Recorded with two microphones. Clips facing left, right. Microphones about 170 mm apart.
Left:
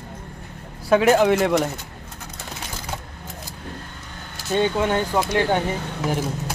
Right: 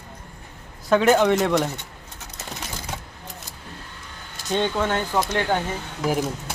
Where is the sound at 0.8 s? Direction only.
5° left (ahead or behind).